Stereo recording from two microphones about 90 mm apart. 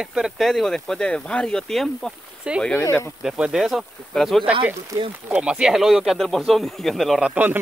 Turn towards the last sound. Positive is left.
turn(degrees=-15)  # may be behind; listen again after turning